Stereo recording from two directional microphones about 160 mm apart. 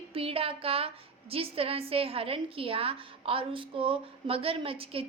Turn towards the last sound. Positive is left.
turn(degrees=-35)  # may be behind; listen again after turning